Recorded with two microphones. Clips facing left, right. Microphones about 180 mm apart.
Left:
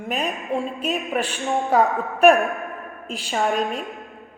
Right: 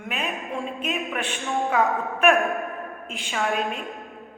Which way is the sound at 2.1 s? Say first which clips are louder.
Left 5 dB; 35° left (ahead or behind).